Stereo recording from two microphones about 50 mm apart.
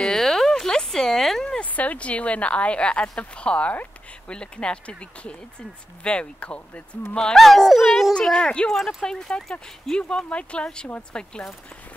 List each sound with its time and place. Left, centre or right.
0.0 s a sound: centre
1.6 s speech: left
7.3 s speech: centre
8.1 s speech: centre